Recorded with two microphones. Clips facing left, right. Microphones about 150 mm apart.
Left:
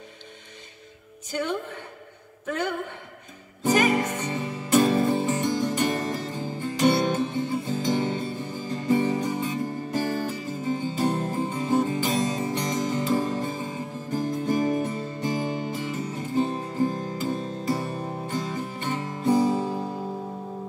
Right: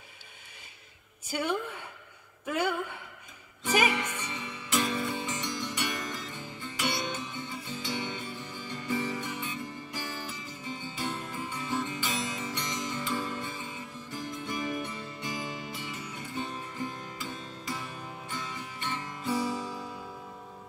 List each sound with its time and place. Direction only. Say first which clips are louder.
1.3 s a woman's voice: left 3 dB; 10° right (ahead or behind)
3.9 s music: left 9 dB; 35° left (ahead or behind)